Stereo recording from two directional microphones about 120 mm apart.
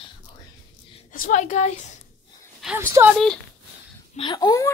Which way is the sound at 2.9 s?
15° right (ahead or behind).